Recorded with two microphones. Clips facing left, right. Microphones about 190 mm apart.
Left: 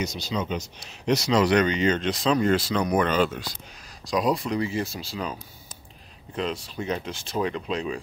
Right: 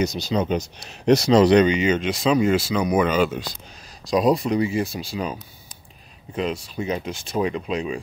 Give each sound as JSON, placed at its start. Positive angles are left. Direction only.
{"t": 0.0, "sound": "speech", "side_deg": -40}
{"t": 1.4, "sound": "speech", "side_deg": -25}
{"t": 1.7, "sound": "speech", "side_deg": -10}
{"t": 4.1, "sound": "speech", "side_deg": -20}